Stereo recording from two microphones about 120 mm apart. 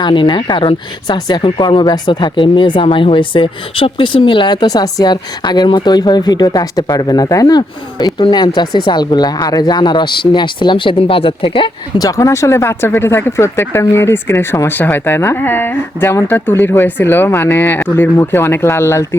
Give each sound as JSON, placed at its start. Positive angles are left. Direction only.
{"t": 0.0, "sound": "speech", "side_deg": 40}
{"t": 11.9, "sound": "speech", "side_deg": 30}